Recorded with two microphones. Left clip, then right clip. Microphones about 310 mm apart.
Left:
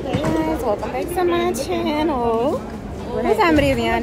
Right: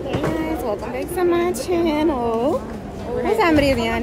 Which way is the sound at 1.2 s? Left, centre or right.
Centre.